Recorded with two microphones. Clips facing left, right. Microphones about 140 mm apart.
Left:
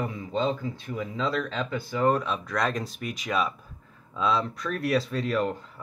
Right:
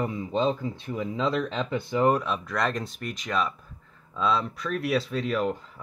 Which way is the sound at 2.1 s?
5° right (ahead or behind).